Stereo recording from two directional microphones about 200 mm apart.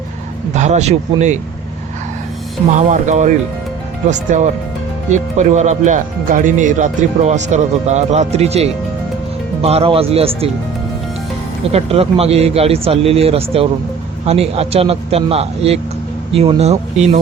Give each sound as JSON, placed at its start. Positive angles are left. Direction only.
{"t": 0.5, "sound": "speech", "side_deg": -35}
{"t": 2.7, "sound": "speech", "side_deg": -35}
{"t": 11.7, "sound": "speech", "side_deg": -30}